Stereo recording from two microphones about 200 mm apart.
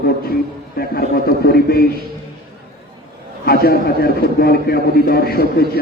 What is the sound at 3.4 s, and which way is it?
A man's voice, 50° left (ahead or behind).